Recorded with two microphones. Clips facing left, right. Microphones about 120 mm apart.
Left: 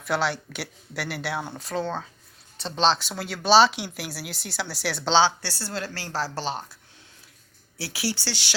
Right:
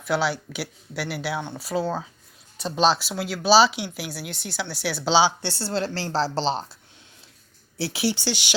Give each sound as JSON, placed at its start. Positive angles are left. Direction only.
{"t": 0.0, "sound": "speech", "side_deg": 0}
{"t": 5.4, "sound": "a woman's voice", "side_deg": -25}
{"t": 7.8, "sound": "a woman's voice", "side_deg": -25}